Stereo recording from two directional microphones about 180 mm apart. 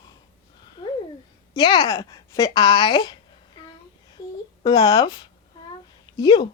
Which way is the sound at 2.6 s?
25° left (ahead or behind).